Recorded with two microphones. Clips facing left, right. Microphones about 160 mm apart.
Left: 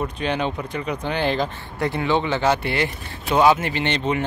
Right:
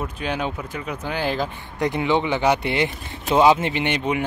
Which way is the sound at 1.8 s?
20° right (ahead or behind).